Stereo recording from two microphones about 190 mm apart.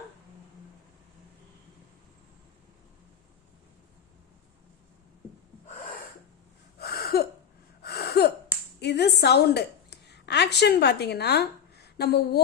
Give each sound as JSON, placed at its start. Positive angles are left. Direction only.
{"t": 6.7, "sound": "a sound", "side_deg": 55}
{"t": 7.8, "sound": "gasp", "side_deg": 55}
{"t": 8.8, "sound": "a woman's voice", "side_deg": 60}